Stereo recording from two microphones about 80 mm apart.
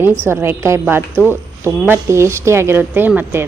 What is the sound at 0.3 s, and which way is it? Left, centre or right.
A woman's voice, right.